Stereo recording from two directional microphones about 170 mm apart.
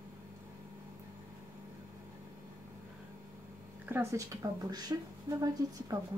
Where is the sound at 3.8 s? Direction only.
15° right (ahead or behind).